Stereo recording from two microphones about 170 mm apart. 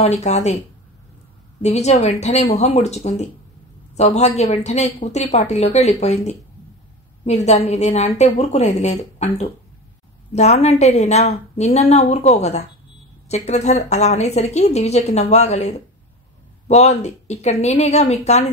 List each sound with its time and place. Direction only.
0.0 s a woman's voice: 40° left (ahead or behind)
1.6 s a woman's voice: 40° left (ahead or behind)